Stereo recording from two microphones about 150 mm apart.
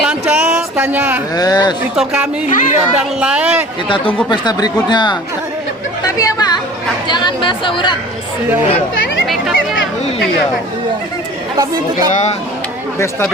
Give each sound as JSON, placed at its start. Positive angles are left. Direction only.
{"t": 0.0, "sound": "a sound", "side_deg": -10}
{"t": 1.4, "sound": "speech", "side_deg": 25}
{"t": 2.0, "sound": "speech", "side_deg": -5}
{"t": 3.8, "sound": "speech", "side_deg": 35}
{"t": 6.1, "sound": "chatter", "side_deg": 25}
{"t": 9.2, "sound": "a sound", "side_deg": 0}
{"t": 11.5, "sound": "speech", "side_deg": -25}